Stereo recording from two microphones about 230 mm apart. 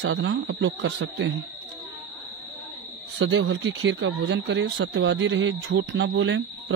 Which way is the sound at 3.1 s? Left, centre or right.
Right.